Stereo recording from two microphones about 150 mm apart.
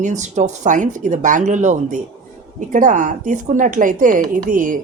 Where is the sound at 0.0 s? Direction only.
55° right (ahead or behind).